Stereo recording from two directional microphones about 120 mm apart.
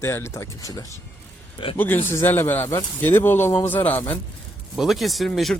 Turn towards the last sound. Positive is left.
turn(degrees=0)  # may be behind; listen again after turning